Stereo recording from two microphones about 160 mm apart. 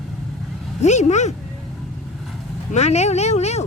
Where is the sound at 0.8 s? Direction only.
45° left (ahead or behind).